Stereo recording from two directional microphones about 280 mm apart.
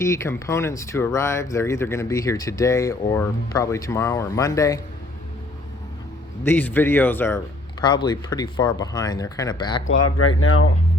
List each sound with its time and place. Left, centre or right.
0.0 s speech: centre
6.4 s speech: centre
10.0 s speech: left